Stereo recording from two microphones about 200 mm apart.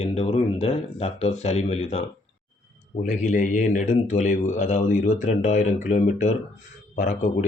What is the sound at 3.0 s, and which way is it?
A man's voice, 40° left (ahead or behind).